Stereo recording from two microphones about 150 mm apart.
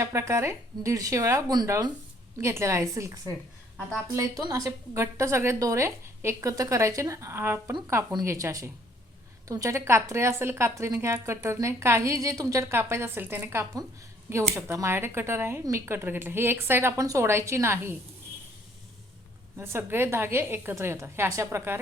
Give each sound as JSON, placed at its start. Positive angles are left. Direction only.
{"t": 0.0, "sound": "a woman's voice", "side_deg": -20}
{"t": 19.5, "sound": "speech", "side_deg": -15}